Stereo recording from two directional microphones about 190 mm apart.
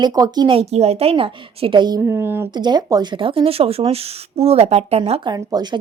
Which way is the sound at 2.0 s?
10° right (ahead or behind).